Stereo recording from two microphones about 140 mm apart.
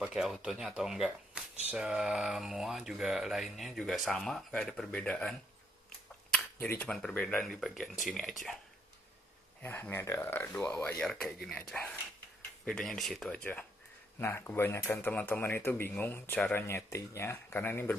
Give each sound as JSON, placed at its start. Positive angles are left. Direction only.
{"t": 0.0, "sound": "speech", "side_deg": -5}
{"t": 6.3, "sound": "speech", "side_deg": 10}
{"t": 9.6, "sound": "speech", "side_deg": 15}
{"t": 14.2, "sound": "speech", "side_deg": 15}